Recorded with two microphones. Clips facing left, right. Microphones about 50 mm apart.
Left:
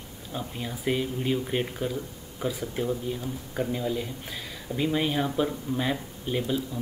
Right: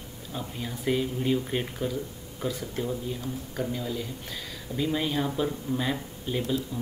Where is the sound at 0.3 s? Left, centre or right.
Centre.